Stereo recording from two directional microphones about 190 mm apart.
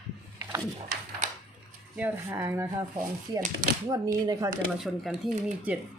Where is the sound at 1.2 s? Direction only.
40° right (ahead or behind).